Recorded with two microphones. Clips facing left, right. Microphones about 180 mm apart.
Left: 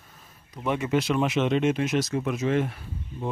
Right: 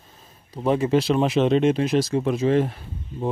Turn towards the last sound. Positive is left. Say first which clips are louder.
# right 4 dB
turn(degrees=-35)  # may be behind; listen again after turning